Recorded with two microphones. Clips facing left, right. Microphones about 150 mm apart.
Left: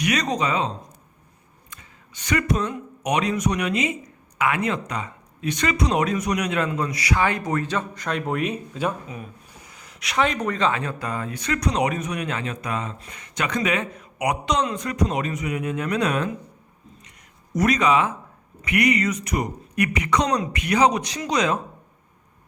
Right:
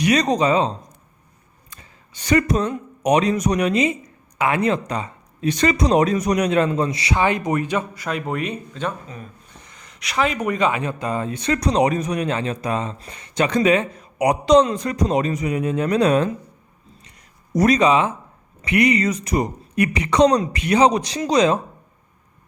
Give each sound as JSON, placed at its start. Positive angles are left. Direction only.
{"t": 0.0, "sound": "speech", "side_deg": -30}
{"t": 1.7, "sound": "speech", "side_deg": -35}
{"t": 17.5, "sound": "speech", "side_deg": -35}